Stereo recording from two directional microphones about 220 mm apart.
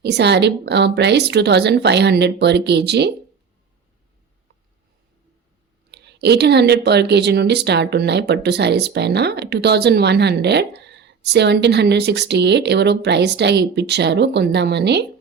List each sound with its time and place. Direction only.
0.0 s a woman's voice: 50° right (ahead or behind)
5.9 s a woman's voice: 50° right (ahead or behind)